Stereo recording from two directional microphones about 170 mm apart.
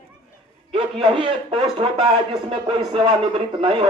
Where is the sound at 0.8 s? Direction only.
30° right (ahead or behind).